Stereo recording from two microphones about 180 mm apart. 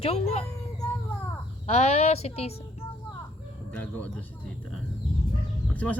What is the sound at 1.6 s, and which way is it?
Speech, 35° left (ahead or behind).